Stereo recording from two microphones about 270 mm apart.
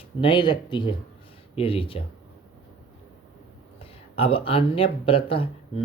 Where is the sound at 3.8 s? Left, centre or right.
Left.